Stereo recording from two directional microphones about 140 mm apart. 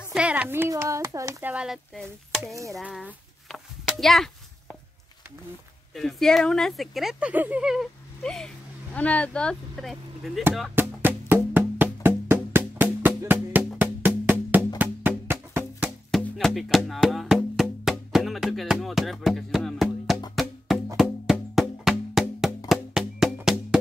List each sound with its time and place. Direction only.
0.1 s a woman's voice: 10° right (ahead or behind)
1.5 s speech: 5° right (ahead or behind)
2.5 s a sound: 20° right (ahead or behind)
2.8 s a sound: centre (ahead or behind)
5.9 s speech: centre (ahead or behind)
8.2 s speech: 5° left (ahead or behind)
10.7 s music: 15° right (ahead or behind)
16.1 s music: 5° left (ahead or behind)